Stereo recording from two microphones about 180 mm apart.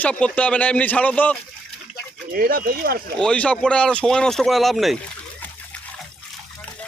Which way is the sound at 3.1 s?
5° left (ahead or behind).